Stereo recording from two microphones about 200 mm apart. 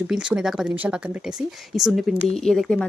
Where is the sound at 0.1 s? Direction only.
5° right (ahead or behind).